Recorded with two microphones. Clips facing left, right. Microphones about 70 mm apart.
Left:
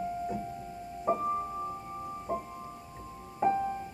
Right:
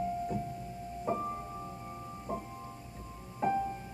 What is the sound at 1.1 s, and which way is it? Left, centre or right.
Music, left.